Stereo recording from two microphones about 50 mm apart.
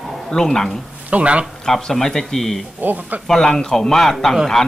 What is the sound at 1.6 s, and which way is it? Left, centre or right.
A man's voice, centre.